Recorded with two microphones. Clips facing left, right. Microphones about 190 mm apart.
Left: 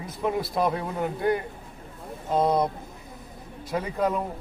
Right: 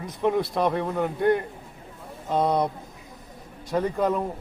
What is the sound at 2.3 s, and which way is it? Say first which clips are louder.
Speech: even; centre (ahead or behind).